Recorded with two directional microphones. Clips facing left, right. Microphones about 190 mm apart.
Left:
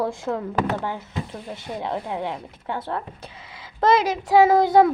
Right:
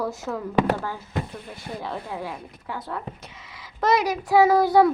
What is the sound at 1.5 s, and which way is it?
Speech, 20° left (ahead or behind).